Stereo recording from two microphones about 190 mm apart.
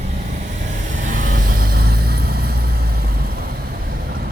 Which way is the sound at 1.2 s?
45° right (ahead or behind).